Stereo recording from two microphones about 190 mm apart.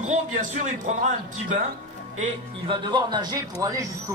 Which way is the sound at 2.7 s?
25° right (ahead or behind).